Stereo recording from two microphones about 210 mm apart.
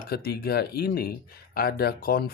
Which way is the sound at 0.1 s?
50° left (ahead or behind).